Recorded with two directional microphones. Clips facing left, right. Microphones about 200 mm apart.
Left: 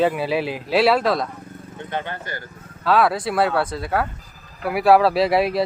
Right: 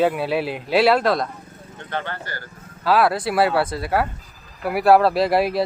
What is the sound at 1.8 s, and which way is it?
Speech, 15° left (ahead or behind).